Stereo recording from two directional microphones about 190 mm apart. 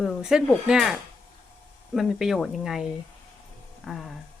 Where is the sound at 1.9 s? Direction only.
Centre (ahead or behind).